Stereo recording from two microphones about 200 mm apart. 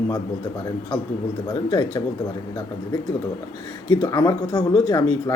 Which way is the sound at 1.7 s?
25° left (ahead or behind).